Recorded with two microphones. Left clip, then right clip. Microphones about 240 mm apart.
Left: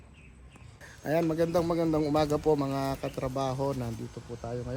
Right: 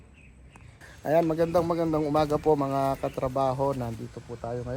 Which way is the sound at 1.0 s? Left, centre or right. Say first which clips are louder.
Right 4 dB; centre.